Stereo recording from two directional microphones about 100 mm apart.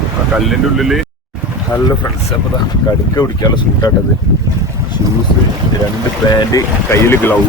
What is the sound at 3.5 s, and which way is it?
Speech, 40° left (ahead or behind).